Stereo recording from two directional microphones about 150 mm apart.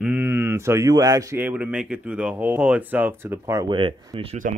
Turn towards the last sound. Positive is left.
turn(degrees=-35)  # may be behind; listen again after turning